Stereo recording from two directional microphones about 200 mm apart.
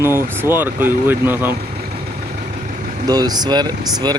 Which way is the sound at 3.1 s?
20° right (ahead or behind).